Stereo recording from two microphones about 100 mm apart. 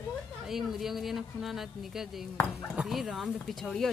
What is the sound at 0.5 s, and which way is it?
Speech, centre (ahead or behind).